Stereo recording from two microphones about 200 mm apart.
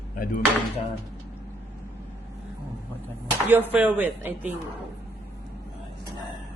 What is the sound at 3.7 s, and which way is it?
Speech, 10° right (ahead or behind).